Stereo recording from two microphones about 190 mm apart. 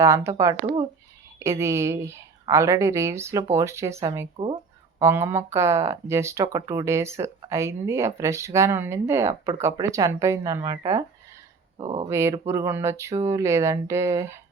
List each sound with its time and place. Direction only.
0.0 s speech: 15° right (ahead or behind)
11.8 s speech: 30° right (ahead or behind)
12.0 s speech: 15° right (ahead or behind)